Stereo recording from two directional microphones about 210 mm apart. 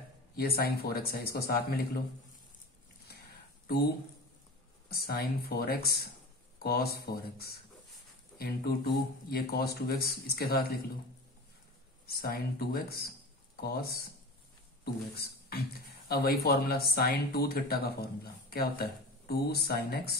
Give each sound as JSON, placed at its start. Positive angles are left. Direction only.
{"t": 0.4, "sound": "speech", "side_deg": 45}
{"t": 4.8, "sound": "speech", "side_deg": 45}
{"t": 12.1, "sound": "speech", "side_deg": 45}
{"t": 16.1, "sound": "speech", "side_deg": 45}